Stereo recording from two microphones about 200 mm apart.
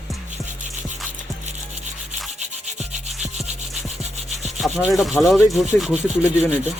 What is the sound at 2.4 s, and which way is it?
Rub, 35° right (ahead or behind).